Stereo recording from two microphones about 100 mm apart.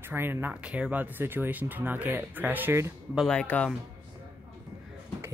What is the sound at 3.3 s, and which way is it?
Speech, 10° left (ahead or behind).